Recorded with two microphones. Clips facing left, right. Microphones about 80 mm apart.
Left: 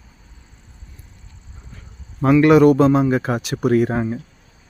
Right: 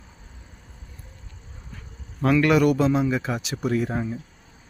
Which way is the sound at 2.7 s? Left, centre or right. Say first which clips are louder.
Left 6 dB; left.